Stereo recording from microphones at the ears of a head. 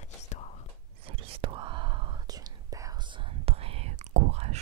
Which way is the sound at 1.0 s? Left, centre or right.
Right.